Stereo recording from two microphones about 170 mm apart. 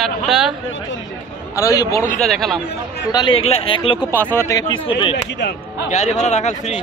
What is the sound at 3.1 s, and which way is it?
Speech, 25° left (ahead or behind).